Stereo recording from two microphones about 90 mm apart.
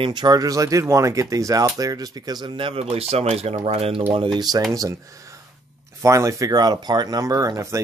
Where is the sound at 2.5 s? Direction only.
70° right (ahead or behind); by 4.0 s 90° right.